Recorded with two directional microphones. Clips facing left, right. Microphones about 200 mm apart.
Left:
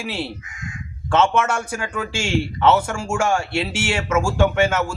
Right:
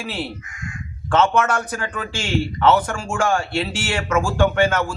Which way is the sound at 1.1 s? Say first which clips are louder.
Right 1 dB; 10° left (ahead or behind).